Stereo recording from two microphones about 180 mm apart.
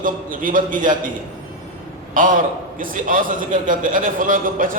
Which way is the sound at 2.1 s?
50° right (ahead or behind).